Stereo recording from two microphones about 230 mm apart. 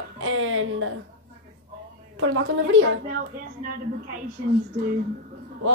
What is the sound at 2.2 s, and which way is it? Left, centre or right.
Speech, right.